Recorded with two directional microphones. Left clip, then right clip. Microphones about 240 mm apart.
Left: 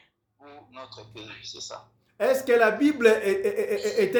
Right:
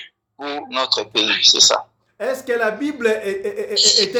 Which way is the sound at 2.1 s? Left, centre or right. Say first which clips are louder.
Even; centre.